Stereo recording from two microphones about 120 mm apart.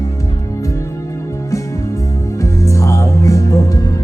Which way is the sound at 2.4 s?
25° left (ahead or behind).